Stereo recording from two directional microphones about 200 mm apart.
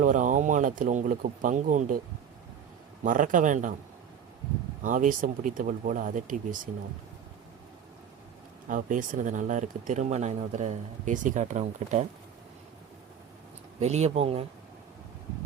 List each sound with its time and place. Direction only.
0.0 s speech: 40° right (ahead or behind)
3.0 s speech: 40° right (ahead or behind)
4.8 s speech: 40° right (ahead or behind)
8.6 s speech: 40° right (ahead or behind)
13.7 s speech: 35° right (ahead or behind)